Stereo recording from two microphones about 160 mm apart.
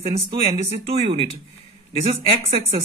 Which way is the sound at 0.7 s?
40° right (ahead or behind).